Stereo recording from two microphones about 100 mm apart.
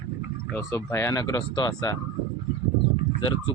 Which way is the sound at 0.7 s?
30° left (ahead or behind).